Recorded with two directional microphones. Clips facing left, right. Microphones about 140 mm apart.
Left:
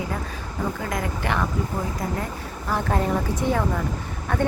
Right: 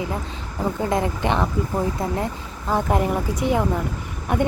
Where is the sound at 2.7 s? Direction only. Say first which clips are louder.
Right 3 dB; 15° right (ahead or behind).